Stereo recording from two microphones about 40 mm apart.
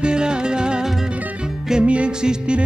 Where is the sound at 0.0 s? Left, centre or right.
Right.